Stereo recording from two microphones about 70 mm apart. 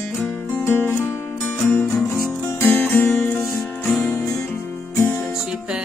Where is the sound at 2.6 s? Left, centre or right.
Left.